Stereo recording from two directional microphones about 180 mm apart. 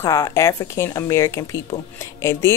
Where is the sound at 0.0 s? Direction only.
15° left (ahead or behind).